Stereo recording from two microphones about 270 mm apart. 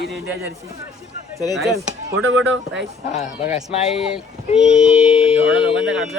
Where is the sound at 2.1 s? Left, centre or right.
Right.